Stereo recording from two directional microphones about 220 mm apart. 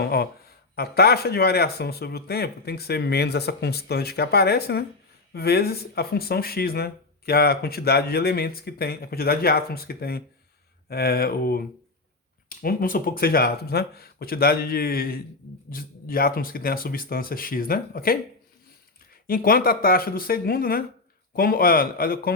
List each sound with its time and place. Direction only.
0.0 s speech: 45° left (ahead or behind)
19.3 s speech: 40° left (ahead or behind)